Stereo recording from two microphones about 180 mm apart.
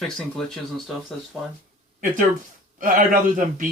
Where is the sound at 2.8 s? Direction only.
50° right (ahead or behind).